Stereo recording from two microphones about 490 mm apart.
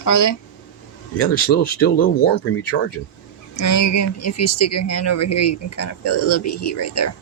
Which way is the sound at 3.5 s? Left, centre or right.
Left.